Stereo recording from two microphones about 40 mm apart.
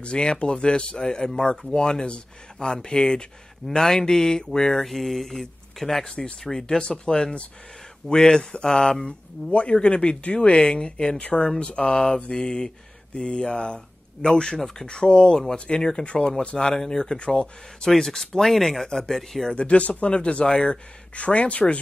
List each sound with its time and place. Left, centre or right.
0.0 s speech: left
4.8 s speech: centre
6.0 s speech: centre
9.5 s speech: left; by 19.5 s centre
19.5 s speech: left